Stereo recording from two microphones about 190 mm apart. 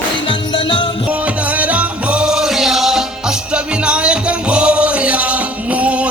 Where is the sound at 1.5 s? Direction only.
5° right (ahead or behind).